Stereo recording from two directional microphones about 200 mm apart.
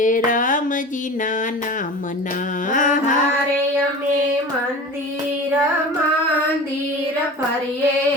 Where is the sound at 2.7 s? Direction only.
40° left (ahead or behind).